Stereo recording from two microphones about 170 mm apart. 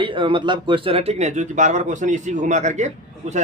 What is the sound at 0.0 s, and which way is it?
Speech, 30° right (ahead or behind).